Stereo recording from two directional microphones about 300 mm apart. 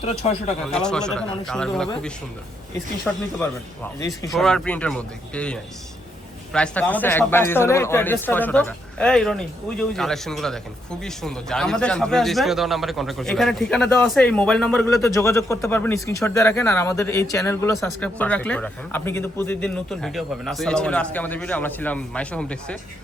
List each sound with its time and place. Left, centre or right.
0.0 s speech: left
0.7 s a man's voice: centre
4.3 s a man's voice: centre